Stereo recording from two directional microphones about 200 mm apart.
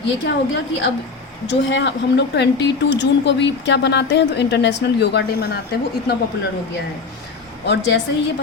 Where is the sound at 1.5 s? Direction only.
65° left (ahead or behind).